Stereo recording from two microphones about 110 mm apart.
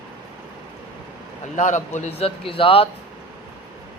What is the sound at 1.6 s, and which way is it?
Speech, 90° left.